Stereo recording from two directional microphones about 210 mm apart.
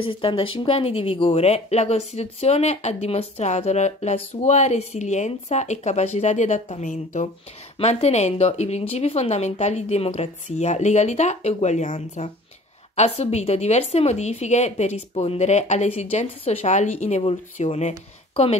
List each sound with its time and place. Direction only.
0.0 s speech: 25° left (ahead or behind)